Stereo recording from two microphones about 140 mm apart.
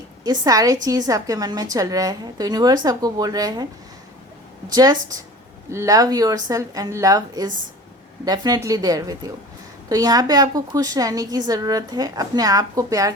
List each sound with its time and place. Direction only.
0.3 s a woman's voice: 25° right (ahead or behind)
4.7 s a woman's voice: 30° right (ahead or behind)